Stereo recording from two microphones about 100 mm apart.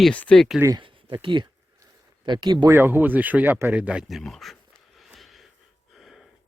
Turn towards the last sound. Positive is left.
turn(degrees=0)  # may be behind; listen again after turning